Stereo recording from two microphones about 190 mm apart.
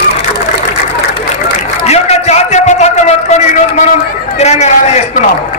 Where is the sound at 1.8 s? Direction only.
35° left (ahead or behind).